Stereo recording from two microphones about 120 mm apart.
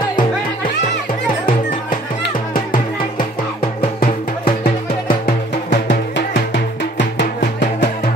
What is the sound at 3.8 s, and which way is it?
Music, 60° left (ahead or behind).